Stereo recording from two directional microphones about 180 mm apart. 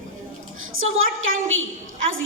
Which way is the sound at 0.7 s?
90° right.